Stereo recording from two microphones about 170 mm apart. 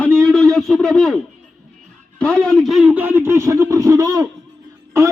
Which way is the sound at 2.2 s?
5° left (ahead or behind).